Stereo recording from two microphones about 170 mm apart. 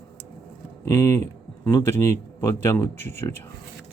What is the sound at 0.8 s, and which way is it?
Speech, 15° left (ahead or behind).